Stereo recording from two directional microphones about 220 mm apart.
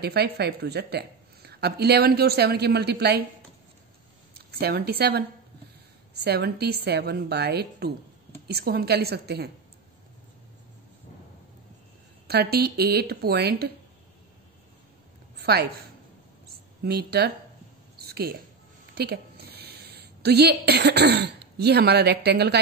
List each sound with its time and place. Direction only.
0.0 s a woman's voice: 45° right (ahead or behind)
4.3 s speech: 45° right (ahead or behind)
6.2 s a woman's voice: 45° right (ahead or behind)
12.3 s a woman's voice: 45° right (ahead or behind)
15.3 s a sound: 45° right (ahead or behind)
16.8 s a woman's voice: 45° right (ahead or behind)
17.9 s a sound: 45° right (ahead or behind)
18.9 s a woman's voice: 45° right (ahead or behind)